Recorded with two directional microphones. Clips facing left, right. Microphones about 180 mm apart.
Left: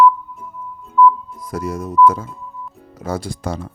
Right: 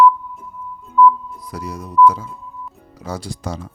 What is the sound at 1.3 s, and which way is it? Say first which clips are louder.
Speech: left 5 dB; 50° left (ahead or behind).